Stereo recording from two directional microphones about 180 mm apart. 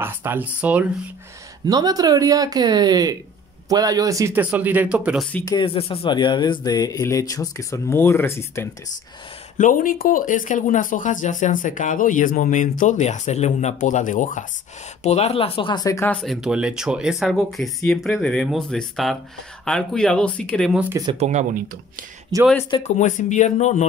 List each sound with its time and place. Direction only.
0.0 s speech: 10° right (ahead or behind)
1.7 s speech: 20° right (ahead or behind); by 5.3 s 5° right (ahead or behind)
5.4 s speech: 25° left (ahead or behind)
9.6 s speech: 50° left (ahead or behind); by 16.1 s 20° left (ahead or behind)
16.1 s speech: centre (ahead or behind)
21.1 s speech: 40° right (ahead or behind)
22.3 s speech: 20° right (ahead or behind)
22.8 s speech: 40° left (ahead or behind)